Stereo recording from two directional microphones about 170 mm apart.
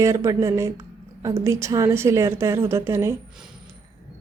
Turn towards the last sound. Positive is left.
turn(degrees=-15)  # may be behind; listen again after turning